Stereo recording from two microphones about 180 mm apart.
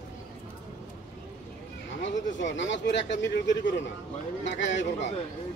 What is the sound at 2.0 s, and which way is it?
Speech, 90° left.